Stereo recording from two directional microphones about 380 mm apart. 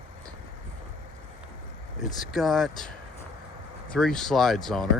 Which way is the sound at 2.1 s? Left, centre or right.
Centre.